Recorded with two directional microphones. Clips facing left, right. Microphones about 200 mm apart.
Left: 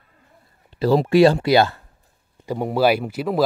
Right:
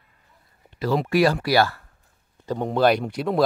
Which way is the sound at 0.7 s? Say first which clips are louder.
Left 6 dB; 30° left (ahead or behind).